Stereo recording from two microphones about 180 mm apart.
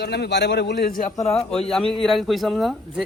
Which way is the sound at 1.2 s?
35° left (ahead or behind).